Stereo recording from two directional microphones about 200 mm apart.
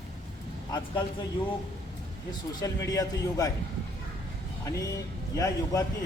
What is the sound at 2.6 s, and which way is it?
Speech, 15° left (ahead or behind).